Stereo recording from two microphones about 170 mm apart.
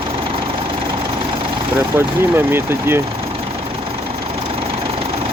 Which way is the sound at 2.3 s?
15° right (ahead or behind).